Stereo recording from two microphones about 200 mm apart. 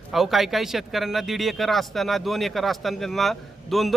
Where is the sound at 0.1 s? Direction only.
Centre (ahead or behind).